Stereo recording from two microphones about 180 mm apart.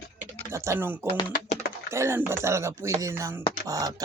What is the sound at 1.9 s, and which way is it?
Speech, 15° right (ahead or behind).